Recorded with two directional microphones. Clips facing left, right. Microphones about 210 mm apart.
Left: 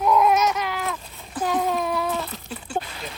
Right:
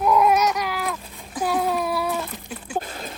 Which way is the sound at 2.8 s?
45° right (ahead or behind).